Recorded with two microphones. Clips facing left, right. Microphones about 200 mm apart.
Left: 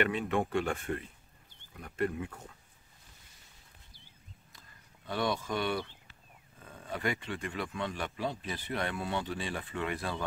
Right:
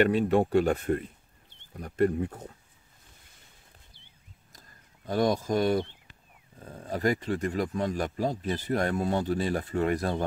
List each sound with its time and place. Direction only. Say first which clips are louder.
0.0 s speech: right 7 dB; 35° right (ahead or behind)
4.5 s a sound: right 2 dB; 45° right (ahead or behind)
6.6 s speech: right 7 dB; 40° right (ahead or behind)